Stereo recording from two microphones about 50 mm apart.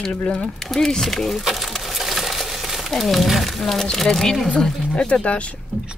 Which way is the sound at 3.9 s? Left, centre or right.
Centre.